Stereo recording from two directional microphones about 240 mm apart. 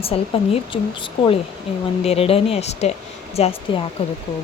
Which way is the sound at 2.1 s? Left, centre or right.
Left.